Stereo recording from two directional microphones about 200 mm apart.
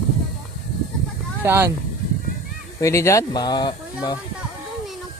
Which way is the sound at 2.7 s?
15° left (ahead or behind).